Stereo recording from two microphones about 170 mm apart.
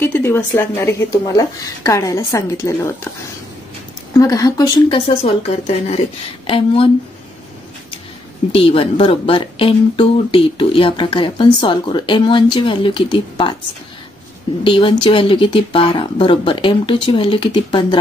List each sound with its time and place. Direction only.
0.0 s a woman's voice: 15° left (ahead or behind)
4.1 s speech: 20° left (ahead or behind)
8.5 s speech: 35° left (ahead or behind)
14.6 s speech: 30° left (ahead or behind)